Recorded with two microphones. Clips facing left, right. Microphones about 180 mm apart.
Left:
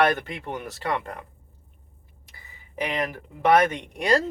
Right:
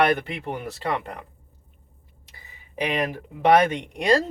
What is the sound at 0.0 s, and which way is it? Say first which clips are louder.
Speech: right 1 dB; 20° right (ahead or behind).